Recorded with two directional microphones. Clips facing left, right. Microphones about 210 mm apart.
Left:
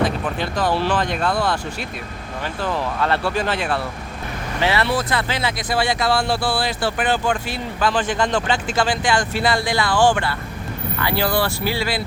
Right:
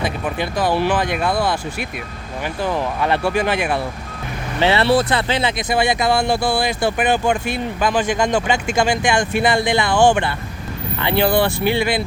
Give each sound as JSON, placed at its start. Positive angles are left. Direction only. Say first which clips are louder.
{"t": 0.0, "sound": "speech", "louder": "left 1 dB", "side_deg": -10}
{"t": 2.6, "sound": "speech", "louder": "right 2 dB", "side_deg": -15}
{"t": 4.6, "sound": "speech", "louder": "right 5 dB", "side_deg": -30}